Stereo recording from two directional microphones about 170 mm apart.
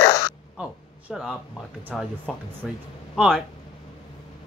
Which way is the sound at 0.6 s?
5° right (ahead or behind).